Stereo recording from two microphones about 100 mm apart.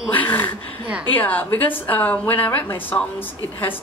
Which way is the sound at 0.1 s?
15° left (ahead or behind).